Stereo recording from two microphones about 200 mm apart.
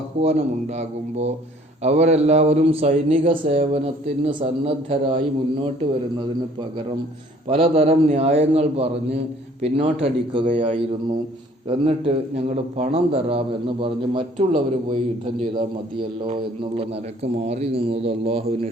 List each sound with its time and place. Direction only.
0.1 s a man's voice: 30° right (ahead or behind)
1.8 s a man's voice: 35° right (ahead or behind)
7.4 s a man's voice: 30° right (ahead or behind)
11.7 s a man's voice: 30° right (ahead or behind)
17.3 s a man's voice: 30° right (ahead or behind)